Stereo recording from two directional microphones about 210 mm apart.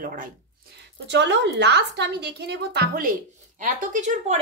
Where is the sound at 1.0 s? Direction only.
55° right (ahead or behind); by 4.4 s 35° right (ahead or behind).